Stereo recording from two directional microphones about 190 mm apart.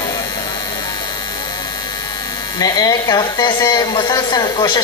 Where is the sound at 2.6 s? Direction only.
20° left (ahead or behind).